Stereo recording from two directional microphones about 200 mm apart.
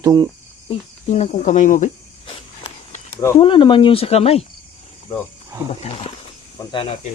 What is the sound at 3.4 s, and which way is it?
Speech, 25° left (ahead or behind).